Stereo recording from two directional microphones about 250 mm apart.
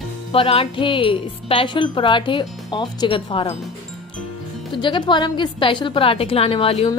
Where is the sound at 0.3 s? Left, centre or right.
Left.